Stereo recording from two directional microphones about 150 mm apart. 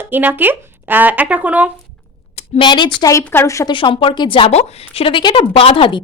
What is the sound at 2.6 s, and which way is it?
A woman's voice, 30° left (ahead or behind).